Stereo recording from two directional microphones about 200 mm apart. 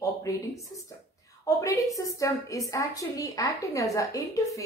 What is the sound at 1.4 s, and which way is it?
A woman's voice, 15° left (ahead or behind).